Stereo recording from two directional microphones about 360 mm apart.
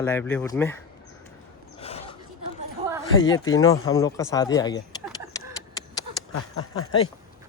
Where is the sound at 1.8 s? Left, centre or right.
Centre.